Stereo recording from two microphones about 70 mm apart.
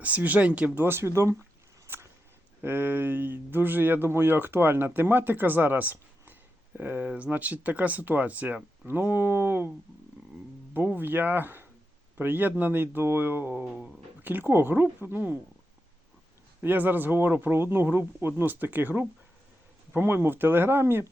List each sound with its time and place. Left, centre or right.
0.0 s speech: right
1.9 s a sound: right
2.6 s speech: right
10.8 s speech: right
16.6 s speech: right